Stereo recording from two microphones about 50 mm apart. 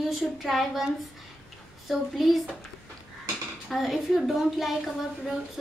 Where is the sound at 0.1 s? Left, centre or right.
Centre.